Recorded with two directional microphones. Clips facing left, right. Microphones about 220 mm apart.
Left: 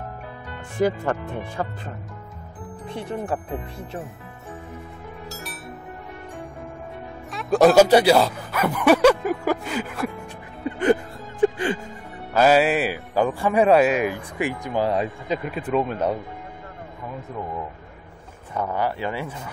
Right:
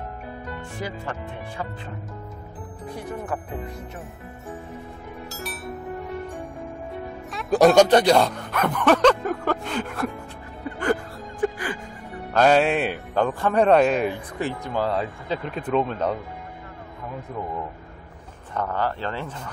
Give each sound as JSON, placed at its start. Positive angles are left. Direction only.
{"t": 0.7, "sound": "speech", "side_deg": 50}
{"t": 2.9, "sound": "speech", "side_deg": 25}
{"t": 5.3, "sound": "music", "side_deg": 0}
{"t": 7.2, "sound": "speech", "side_deg": 0}
{"t": 10.6, "sound": "music", "side_deg": 20}
{"t": 12.4, "sound": "speech", "side_deg": 5}
{"t": 18.5, "sound": "speech", "side_deg": 10}